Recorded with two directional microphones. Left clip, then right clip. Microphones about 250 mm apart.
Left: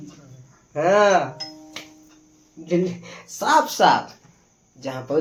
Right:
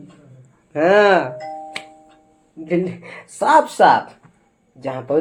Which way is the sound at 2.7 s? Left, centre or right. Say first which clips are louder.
Right 2 dB; centre.